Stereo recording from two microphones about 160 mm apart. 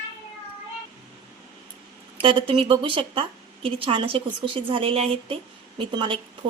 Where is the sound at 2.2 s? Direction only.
35° right (ahead or behind).